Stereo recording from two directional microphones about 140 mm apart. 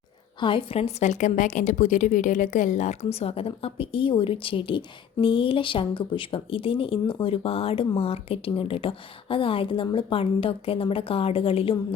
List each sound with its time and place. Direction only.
0.3 s a woman's voice: 35° left (ahead or behind)